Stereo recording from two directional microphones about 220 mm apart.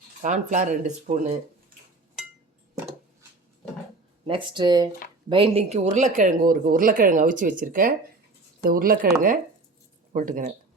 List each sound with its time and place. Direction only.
0.2 s speech: 35° right (ahead or behind)
4.3 s speech: 20° right (ahead or behind); by 10.5 s 40° right (ahead or behind)